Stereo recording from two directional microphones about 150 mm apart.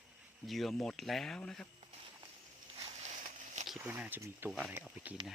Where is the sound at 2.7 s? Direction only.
45° right (ahead or behind).